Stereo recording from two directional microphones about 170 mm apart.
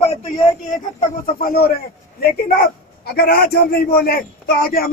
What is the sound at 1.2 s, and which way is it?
A man's voice, 60° left (ahead or behind).